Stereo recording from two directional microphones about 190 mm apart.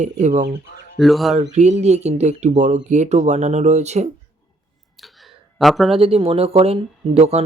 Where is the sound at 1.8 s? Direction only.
35° right (ahead or behind).